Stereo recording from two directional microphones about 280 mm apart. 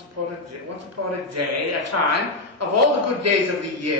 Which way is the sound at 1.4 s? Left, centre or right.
Right.